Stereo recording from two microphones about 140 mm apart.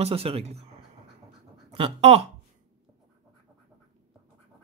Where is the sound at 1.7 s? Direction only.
45° right (ahead or behind).